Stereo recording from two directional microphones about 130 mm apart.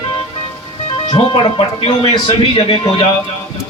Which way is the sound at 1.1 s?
40° left (ahead or behind).